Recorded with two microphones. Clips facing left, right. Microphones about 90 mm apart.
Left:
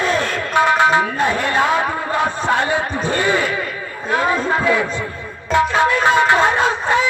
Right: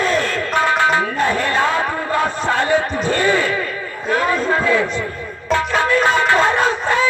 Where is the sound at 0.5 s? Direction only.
20° left (ahead or behind).